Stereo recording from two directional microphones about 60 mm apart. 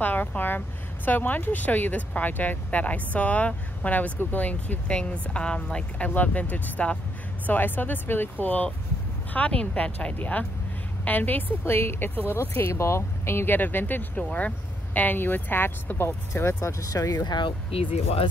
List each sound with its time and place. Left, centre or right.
0.0 s speech: left
11.6 s speech: left
16.8 s speech: left